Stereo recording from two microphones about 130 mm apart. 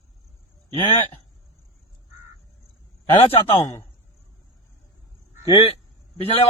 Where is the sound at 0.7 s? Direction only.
50° left (ahead or behind).